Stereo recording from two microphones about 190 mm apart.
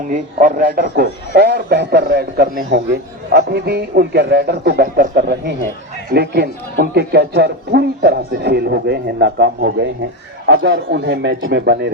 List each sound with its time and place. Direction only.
0.1 s a man's voice: 45° right (ahead or behind); by 11.9 s 65° right (ahead or behind)